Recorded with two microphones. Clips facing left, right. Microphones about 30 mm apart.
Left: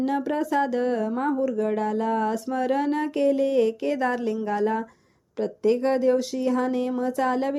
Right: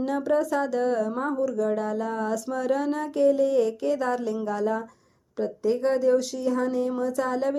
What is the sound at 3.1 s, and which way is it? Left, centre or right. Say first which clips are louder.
Speech: right 2 dB; left.